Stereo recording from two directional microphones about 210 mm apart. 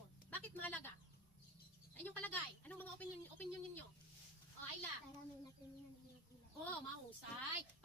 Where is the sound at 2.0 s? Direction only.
10° left (ahead or behind).